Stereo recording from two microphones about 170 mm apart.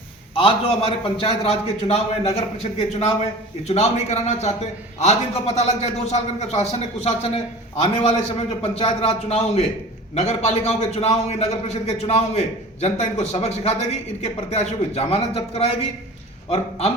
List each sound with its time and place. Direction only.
0.3 s a man's voice: 35° left (ahead or behind)
8.6 s a man's voice: 35° left (ahead or behind)